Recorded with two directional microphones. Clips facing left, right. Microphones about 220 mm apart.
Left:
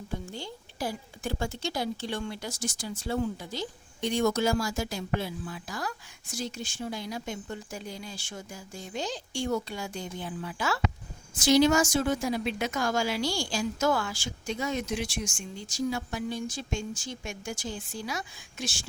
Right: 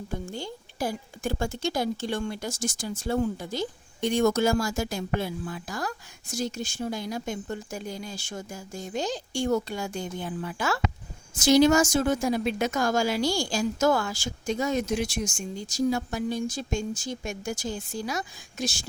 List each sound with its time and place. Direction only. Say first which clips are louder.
0.1 s speech: right 2 dB; 45° right (ahead or behind)